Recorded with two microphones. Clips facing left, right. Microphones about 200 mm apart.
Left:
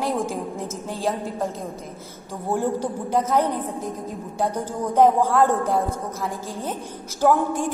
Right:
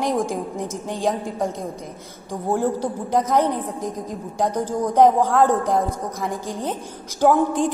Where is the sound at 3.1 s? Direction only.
15° right (ahead or behind).